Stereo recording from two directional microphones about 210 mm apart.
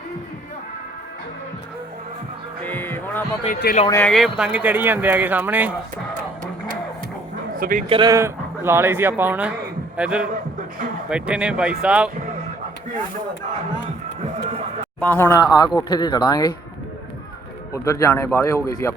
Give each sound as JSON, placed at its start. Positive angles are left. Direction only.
{"t": 2.6, "sound": "music", "side_deg": 10}
{"t": 3.8, "sound": "speech", "side_deg": 10}
{"t": 4.1, "sound": "speech", "side_deg": 0}
{"t": 7.5, "sound": "speech", "side_deg": -40}
{"t": 7.9, "sound": "speech", "side_deg": -20}
{"t": 15.0, "sound": "speech", "side_deg": 10}
{"t": 17.8, "sound": "speech", "side_deg": 15}